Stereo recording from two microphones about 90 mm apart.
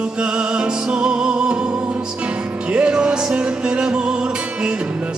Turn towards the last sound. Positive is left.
turn(degrees=-10)  # may be behind; listen again after turning